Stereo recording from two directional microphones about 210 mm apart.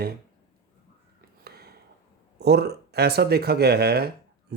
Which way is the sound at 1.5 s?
50° right (ahead or behind).